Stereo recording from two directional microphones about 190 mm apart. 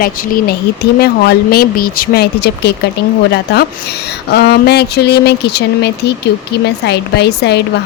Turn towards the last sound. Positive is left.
turn(degrees=60)  # may be behind; listen again after turning